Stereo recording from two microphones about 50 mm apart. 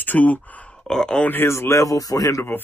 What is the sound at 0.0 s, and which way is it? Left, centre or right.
Speech, left.